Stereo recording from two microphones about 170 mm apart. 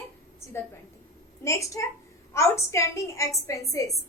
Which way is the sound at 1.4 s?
15° left (ahead or behind).